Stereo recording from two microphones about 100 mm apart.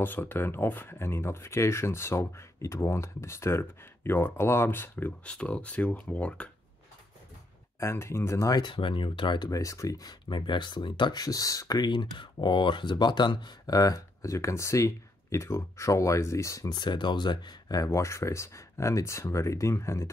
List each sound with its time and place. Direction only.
0.0 s speech: 20° left (ahead or behind)
7.8 s speech: 25° left (ahead or behind)
8.6 s speech: 60° left (ahead or behind)
9.5 s speech: 35° left (ahead or behind)
17.8 s speech: 30° left (ahead or behind)